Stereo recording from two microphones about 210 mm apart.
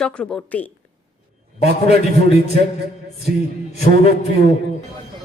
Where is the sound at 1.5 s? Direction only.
30° left (ahead or behind).